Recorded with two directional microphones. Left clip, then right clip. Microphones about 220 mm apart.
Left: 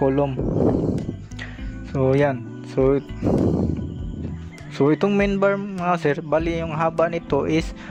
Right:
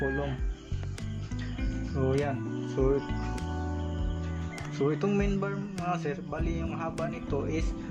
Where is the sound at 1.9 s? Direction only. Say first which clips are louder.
Left 11 dB; 45° left (ahead or behind).